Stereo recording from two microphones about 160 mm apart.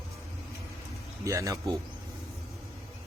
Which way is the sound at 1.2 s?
20° right (ahead or behind).